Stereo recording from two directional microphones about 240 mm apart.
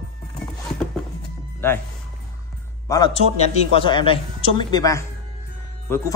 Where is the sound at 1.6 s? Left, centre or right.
Centre.